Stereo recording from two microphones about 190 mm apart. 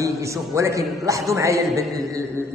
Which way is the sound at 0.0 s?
15° right (ahead or behind).